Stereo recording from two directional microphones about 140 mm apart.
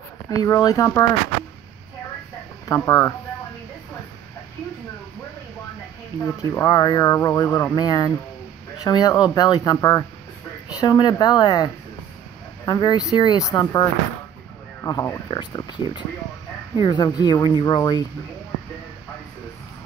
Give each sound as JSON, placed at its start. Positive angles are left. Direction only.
{"t": 0.3, "sound": "speech", "side_deg": 30}
{"t": 2.7, "sound": "speech", "side_deg": 20}
{"t": 6.1, "sound": "speech", "side_deg": 20}